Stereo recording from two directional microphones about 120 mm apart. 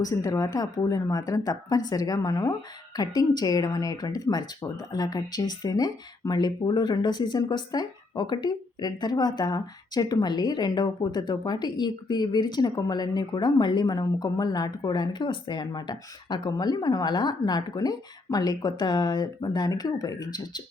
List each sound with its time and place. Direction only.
0.0 s speech: 30° left (ahead or behind)